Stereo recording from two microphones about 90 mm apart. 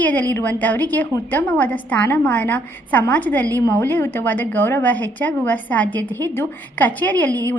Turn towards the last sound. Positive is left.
turn(degrees=20)  # may be behind; listen again after turning